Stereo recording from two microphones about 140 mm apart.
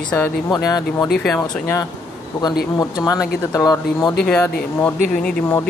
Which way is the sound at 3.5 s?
25° left (ahead or behind).